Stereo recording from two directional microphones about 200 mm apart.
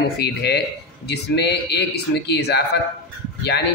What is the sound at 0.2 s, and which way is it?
Speech, 55° left (ahead or behind).